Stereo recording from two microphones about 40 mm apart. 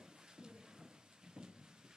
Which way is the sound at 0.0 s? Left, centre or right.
Centre.